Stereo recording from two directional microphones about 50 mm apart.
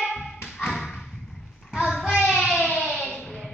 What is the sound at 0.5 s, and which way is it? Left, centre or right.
Tap, centre.